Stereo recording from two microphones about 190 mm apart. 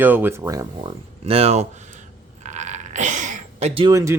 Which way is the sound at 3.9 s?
15° right (ahead or behind).